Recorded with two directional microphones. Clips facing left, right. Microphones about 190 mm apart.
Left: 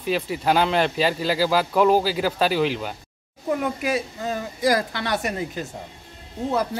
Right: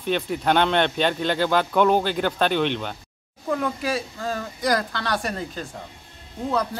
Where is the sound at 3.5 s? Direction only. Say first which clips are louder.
Left 1 dB; 20° left (ahead or behind).